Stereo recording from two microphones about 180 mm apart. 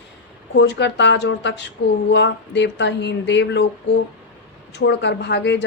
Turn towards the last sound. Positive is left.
turn(degrees=75)  # may be behind; listen again after turning